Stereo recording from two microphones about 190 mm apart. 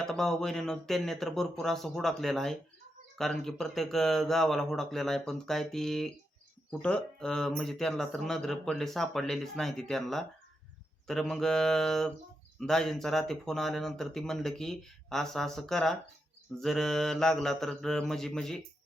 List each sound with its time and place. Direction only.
0.0 s speech: 5° left (ahead or behind)